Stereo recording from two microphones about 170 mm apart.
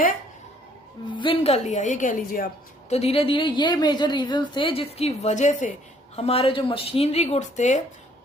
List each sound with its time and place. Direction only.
1.0 s a woman's voice: 30° left (ahead or behind); by 2.5 s 55° left (ahead or behind)
2.9 s a woman's voice: 35° left (ahead or behind)
6.1 s a woman's voice: 35° left (ahead or behind)